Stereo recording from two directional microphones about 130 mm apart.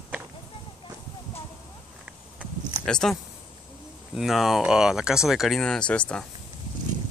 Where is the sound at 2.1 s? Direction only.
10° right (ahead or behind).